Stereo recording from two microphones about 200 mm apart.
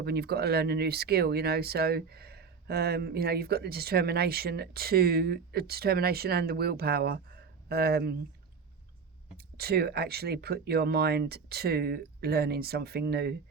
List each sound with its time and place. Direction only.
0.0 s speech: 55° right (ahead or behind)
9.6 s speech: 50° right (ahead or behind)